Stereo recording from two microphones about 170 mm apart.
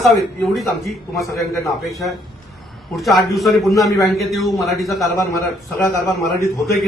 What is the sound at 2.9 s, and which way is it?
A man's voice, centre (ahead or behind).